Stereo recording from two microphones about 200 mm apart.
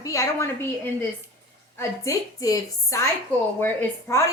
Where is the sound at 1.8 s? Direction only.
15° left (ahead or behind).